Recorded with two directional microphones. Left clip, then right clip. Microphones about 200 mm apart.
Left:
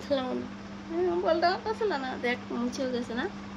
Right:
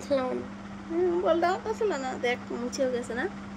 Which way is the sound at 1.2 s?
20° left (ahead or behind).